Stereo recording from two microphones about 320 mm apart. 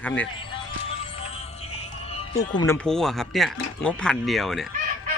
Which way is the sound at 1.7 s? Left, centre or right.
Centre.